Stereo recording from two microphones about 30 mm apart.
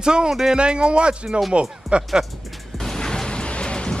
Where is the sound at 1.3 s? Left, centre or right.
Centre.